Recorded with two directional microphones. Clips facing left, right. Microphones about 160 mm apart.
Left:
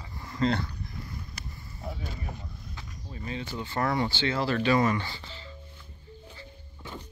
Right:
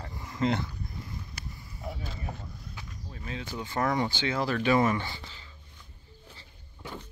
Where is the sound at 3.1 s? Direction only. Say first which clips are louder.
Left 2 dB; 5° left (ahead or behind); by 5.4 s 20° right (ahead or behind).